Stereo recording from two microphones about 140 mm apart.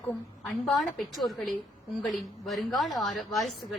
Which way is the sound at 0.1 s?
5° left (ahead or behind).